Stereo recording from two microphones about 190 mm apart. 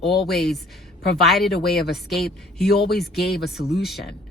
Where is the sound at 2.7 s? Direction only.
55° left (ahead or behind).